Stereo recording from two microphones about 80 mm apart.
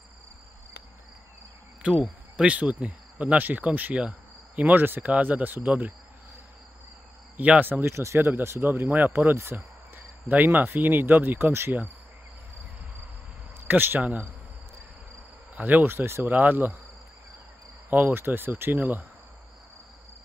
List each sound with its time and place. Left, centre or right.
1.8 s speech: centre
7.3 s speech: centre
7.9 s speech: right
13.7 s speech: right
15.5 s speech: right
17.8 s speech: right